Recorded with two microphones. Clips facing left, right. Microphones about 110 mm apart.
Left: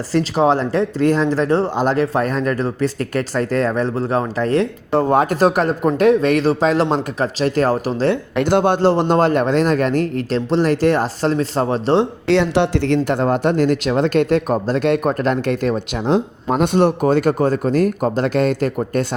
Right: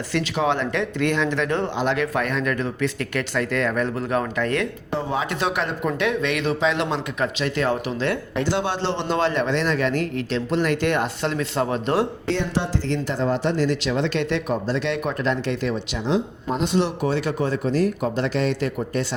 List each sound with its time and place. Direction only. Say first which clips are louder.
0.1 s speech: left 7 dB; 35° left (ahead or behind)
4.9 s speech: left 10 dB; 55° left (ahead or behind); by 8.1 s 35° left (ahead or behind)
8.4 s speech: left 9 dB; 55° left (ahead or behind); by 12.0 s 30° left (ahead or behind)
12.3 s speech: left 9 dB; 80° left; by 16.2 s 45° left (ahead or behind)
16.5 s speech: left 7 dB; 60° left (ahead or behind)